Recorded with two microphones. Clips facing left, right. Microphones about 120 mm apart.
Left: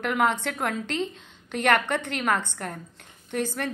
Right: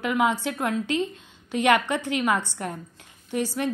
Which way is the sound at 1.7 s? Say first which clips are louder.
Right 1 dB; 55° left (ahead or behind).